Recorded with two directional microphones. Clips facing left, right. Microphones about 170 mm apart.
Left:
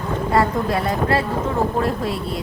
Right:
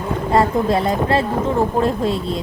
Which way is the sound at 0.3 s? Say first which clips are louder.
Right 3 dB; 25° right (ahead or behind).